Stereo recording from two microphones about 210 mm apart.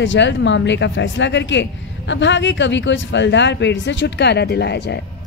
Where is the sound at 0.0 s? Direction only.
60° left (ahead or behind).